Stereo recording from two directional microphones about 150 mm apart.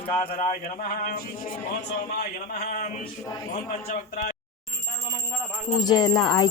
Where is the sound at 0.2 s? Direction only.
55° left (ahead or behind).